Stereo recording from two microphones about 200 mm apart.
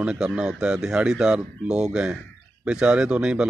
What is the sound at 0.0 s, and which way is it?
Speech, 5° right (ahead or behind).